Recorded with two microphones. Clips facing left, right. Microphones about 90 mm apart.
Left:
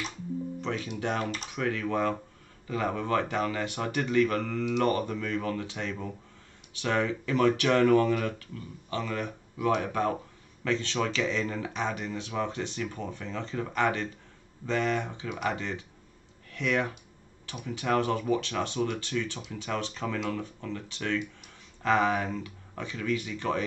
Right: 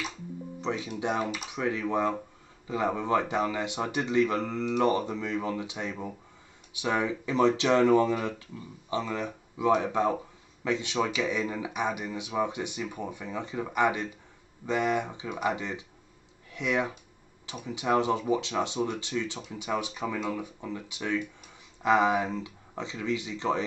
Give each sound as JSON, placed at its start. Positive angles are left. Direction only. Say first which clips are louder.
{"t": 0.6, "sound": "speech", "louder": "right 1 dB", "side_deg": -15}